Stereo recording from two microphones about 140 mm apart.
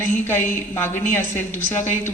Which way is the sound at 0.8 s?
15° left (ahead or behind).